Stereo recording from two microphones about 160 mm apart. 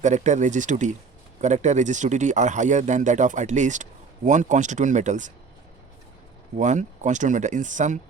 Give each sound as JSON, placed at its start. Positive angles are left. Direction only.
{"t": 0.0, "sound": "a man's voice", "side_deg": -45}
{"t": 6.6, "sound": "a man's voice", "side_deg": -50}